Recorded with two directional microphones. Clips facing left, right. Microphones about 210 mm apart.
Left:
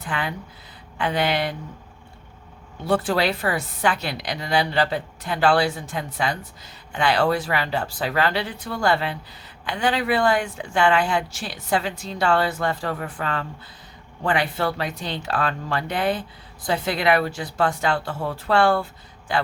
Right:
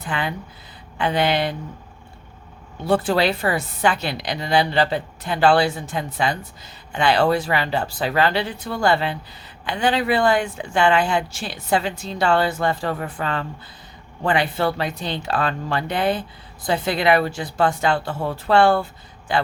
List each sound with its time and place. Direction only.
0.0 s a woman's voice: 25° right (ahead or behind)
2.8 s a woman's voice: 25° right (ahead or behind)